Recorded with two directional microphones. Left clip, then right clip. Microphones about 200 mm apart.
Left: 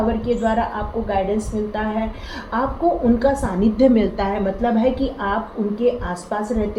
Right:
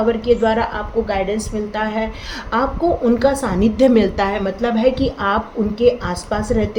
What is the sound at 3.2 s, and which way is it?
A woman's voice, 55° right (ahead or behind).